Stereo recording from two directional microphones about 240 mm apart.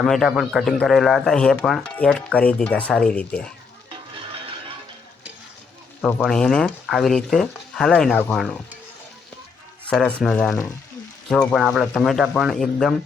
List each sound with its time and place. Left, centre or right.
0.0 s speech: centre
3.8 s music: right
6.0 s speech: centre
9.9 s speech: centre